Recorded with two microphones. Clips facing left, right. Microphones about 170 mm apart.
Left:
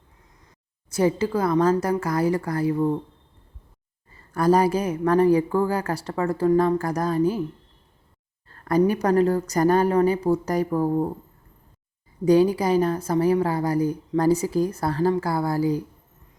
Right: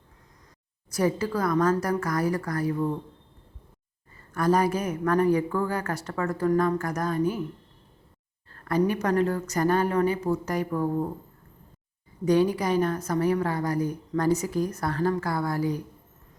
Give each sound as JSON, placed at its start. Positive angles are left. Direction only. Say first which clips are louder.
{"t": 0.9, "sound": "a woman's voice", "louder": "left 4 dB", "side_deg": 25}
{"t": 4.4, "sound": "a woman's voice", "louder": "left 4 dB", "side_deg": 35}
{"t": 8.6, "sound": "a woman's voice", "louder": "left 4 dB", "side_deg": 40}
{"t": 12.2, "sound": "a woman's voice", "louder": "left 4 dB", "side_deg": 35}